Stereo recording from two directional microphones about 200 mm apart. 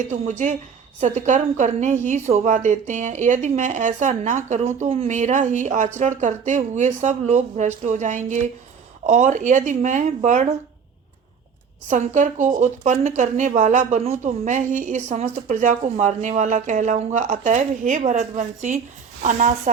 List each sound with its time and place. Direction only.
0.1 s speech: 40° right (ahead or behind)
11.9 s speech: 40° right (ahead or behind)